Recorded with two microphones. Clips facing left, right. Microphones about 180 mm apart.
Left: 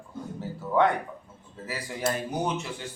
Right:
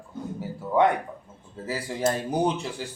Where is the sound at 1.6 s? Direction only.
30° right (ahead or behind).